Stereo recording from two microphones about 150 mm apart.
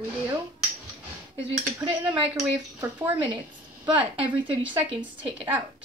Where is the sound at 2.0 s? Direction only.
30° right (ahead or behind).